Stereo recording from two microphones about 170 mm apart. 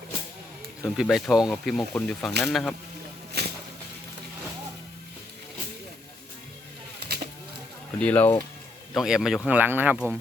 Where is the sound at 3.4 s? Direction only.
70° right (ahead or behind).